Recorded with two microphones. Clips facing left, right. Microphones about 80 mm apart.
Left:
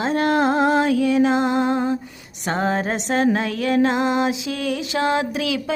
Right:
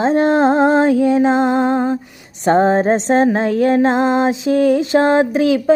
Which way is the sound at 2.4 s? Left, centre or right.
Right.